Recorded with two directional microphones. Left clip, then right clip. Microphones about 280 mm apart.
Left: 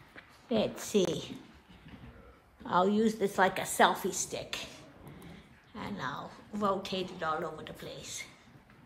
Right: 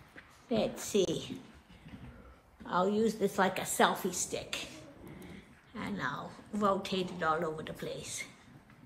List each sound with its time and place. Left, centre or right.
0.1 s a woman's voice: left
2.6 s a woman's voice: left; by 8.3 s centre